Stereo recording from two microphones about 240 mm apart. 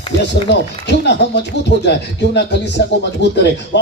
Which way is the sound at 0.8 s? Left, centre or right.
Left.